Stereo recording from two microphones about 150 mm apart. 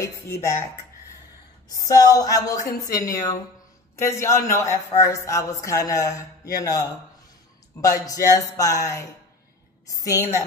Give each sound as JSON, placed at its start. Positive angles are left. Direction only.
{"t": 0.0, "sound": "a man's voice", "side_deg": 20}
{"t": 1.7, "sound": "a man's voice", "side_deg": 25}